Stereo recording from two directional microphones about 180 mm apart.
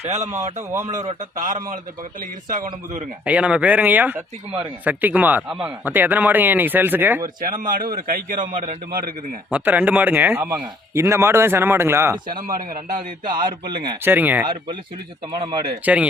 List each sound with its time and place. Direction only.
0.0 s a man's voice: 40° right (ahead or behind)
3.2 s speech: 5° right (ahead or behind)
7.4 s a man's voice: 50° right (ahead or behind)
9.5 s speech: 10° right (ahead or behind)
12.4 s a man's voice: 50° right (ahead or behind)
13.2 s speech: 25° right (ahead or behind)
14.0 s speech: 10° right (ahead or behind)
14.4 s speech: 25° right (ahead or behind)
15.8 s speech: 5° right (ahead or behind)